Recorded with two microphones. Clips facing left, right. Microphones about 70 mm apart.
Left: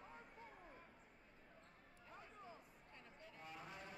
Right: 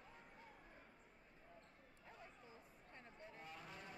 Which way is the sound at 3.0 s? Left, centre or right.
Right.